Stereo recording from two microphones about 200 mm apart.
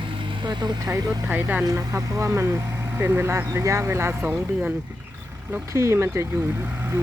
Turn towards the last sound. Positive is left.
turn(degrees=-10)  # may be behind; listen again after turning